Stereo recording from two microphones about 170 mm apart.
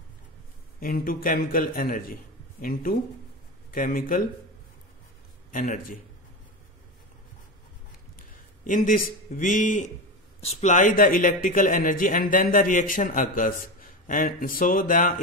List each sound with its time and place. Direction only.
0.7 s a man's voice: 60° left (ahead or behind)
5.5 s a man's voice: 50° left (ahead or behind)
8.6 s a man's voice: 50° left (ahead or behind)